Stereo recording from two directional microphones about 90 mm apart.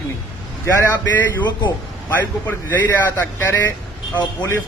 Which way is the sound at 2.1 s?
20° left (ahead or behind).